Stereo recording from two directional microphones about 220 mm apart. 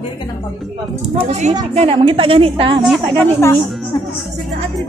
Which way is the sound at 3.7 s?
Centre (ahead or behind).